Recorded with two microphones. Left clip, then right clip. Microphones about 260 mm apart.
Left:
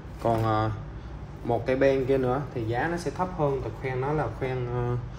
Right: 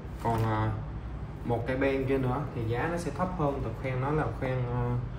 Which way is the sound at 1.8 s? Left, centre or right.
Left.